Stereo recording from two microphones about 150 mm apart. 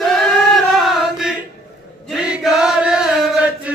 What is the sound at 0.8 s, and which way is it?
Chant, centre (ahead or behind).